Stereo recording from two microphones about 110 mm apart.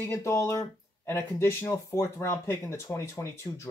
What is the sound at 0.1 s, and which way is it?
Speech, 25° left (ahead or behind).